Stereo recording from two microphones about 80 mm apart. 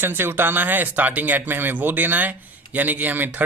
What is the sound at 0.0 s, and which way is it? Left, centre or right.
Speech, right.